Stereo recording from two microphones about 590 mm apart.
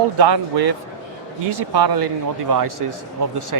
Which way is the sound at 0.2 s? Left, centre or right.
Right.